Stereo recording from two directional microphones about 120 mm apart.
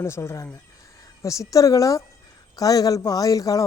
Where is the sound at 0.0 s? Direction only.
25° left (ahead or behind).